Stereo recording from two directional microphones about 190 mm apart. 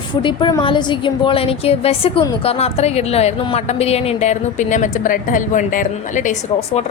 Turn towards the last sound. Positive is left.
turn(degrees=40)  # may be behind; listen again after turning